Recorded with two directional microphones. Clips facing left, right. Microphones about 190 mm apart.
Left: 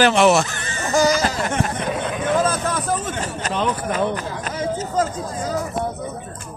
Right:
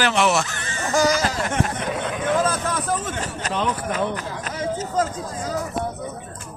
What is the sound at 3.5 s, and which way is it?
Speech, 35° left (ahead or behind).